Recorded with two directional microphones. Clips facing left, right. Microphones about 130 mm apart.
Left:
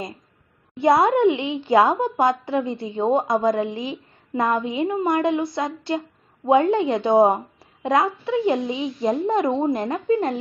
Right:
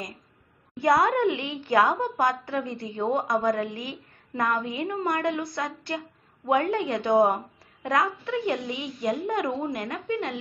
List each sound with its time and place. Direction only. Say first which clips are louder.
0.7 s a woman's voice: left 5 dB; 25° left (ahead or behind)